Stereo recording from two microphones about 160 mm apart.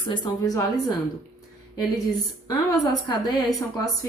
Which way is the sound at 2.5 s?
25° left (ahead or behind).